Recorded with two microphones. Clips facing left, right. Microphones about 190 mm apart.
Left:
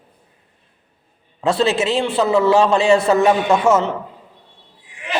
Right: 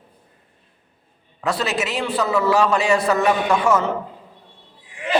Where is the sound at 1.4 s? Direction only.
25° left (ahead or behind).